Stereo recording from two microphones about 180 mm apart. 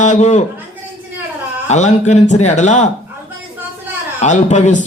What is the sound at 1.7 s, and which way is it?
Speech, 40° left (ahead or behind).